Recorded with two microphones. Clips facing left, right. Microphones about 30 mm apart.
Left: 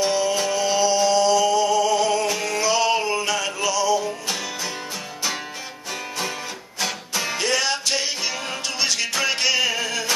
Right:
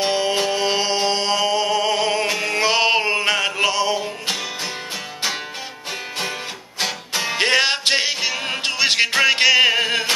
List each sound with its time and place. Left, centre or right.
0.0 s music: right
6.8 s music: right
7.3 s music: right